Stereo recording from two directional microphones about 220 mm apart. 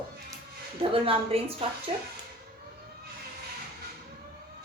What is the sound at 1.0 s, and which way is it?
Speech, 25° right (ahead or behind).